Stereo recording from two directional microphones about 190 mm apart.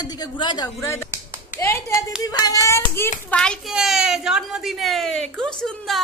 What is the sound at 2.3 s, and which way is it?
Speech, 20° left (ahead or behind).